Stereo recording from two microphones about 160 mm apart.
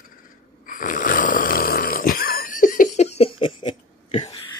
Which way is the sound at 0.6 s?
55° left (ahead or behind).